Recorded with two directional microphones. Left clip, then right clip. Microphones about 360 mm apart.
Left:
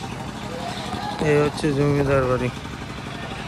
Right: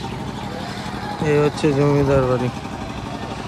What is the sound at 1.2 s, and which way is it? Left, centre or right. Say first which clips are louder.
Speech: right 2 dB; centre.